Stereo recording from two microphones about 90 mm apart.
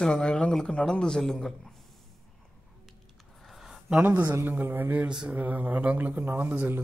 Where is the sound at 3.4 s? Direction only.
Centre (ahead or behind).